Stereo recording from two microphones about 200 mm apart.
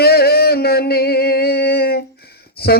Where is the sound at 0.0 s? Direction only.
50° left (ahead or behind).